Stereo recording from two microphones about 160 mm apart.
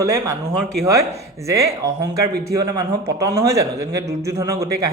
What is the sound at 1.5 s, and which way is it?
Speech, 20° right (ahead or behind).